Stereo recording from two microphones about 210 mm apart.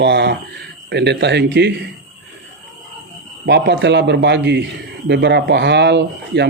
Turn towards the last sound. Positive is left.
turn(degrees=-55)  # may be behind; listen again after turning